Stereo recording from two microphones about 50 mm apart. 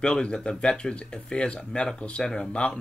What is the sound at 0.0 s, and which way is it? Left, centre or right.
Speech, centre.